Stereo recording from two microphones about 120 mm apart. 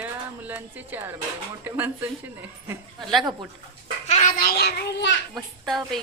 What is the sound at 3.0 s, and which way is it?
Speech, centre (ahead or behind).